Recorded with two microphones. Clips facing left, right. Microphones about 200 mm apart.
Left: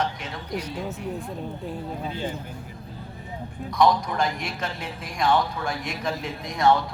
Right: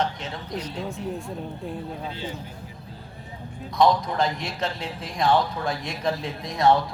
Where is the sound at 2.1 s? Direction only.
50° left (ahead or behind).